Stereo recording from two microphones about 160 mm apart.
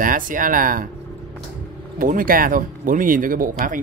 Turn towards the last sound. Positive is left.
turn(degrees=-60)  # may be behind; listen again after turning